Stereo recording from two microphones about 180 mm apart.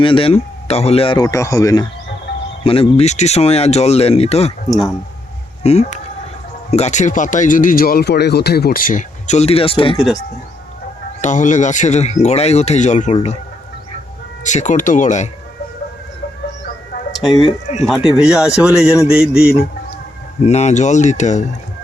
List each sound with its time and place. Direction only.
0.0 s a man's voice: 30° left (ahead or behind)
2.6 s speech: 35° left (ahead or behind)
4.7 s speech: centre (ahead or behind)
5.6 s speech: 35° left (ahead or behind)
11.2 s speech: 45° left (ahead or behind)
14.4 s speech: 45° left (ahead or behind)
17.2 s a man's voice: 25° left (ahead or behind)
17.8 s speech: centre (ahead or behind)
20.4 s speech: 40° left (ahead or behind)